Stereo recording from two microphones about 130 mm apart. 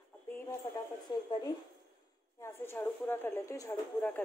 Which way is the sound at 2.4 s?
20° left (ahead or behind).